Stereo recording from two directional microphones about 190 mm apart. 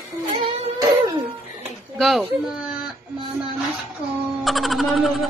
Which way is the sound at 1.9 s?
Centre (ahead or behind).